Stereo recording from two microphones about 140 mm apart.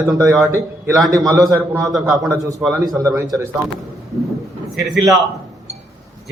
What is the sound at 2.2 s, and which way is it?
A man's voice, 25° right (ahead or behind).